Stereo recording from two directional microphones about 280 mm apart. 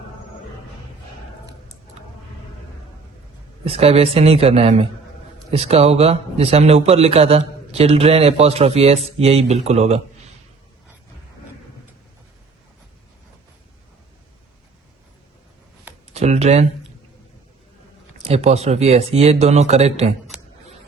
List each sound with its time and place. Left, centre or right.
3.6 s a man's voice: right
16.1 s a sound: right
18.2 s a man's voice: right